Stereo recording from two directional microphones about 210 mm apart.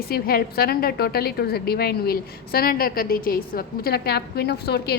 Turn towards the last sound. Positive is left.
turn(degrees=50)  # may be behind; listen again after turning